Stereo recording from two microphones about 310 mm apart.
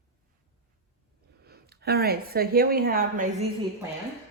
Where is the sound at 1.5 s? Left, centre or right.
Right.